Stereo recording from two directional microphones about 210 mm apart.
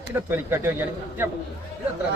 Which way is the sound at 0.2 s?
10° right (ahead or behind).